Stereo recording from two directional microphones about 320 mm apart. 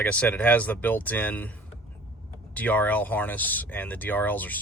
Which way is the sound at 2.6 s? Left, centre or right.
Centre.